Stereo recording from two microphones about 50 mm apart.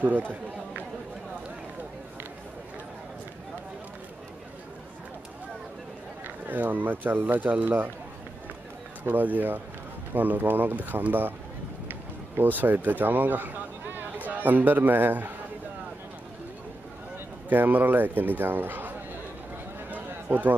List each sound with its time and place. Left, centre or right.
0.0 s speech: right
6.2 s speech: right
9.0 s speech: right
12.4 s speech: right
17.5 s speech: right
20.3 s a man's voice: right